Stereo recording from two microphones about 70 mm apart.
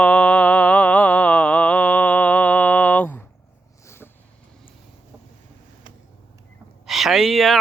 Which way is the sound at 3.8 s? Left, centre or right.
Left.